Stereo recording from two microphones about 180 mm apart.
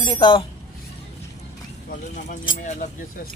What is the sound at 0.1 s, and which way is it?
Speech, 25° left (ahead or behind).